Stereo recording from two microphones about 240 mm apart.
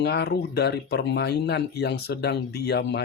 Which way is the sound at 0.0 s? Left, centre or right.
Left.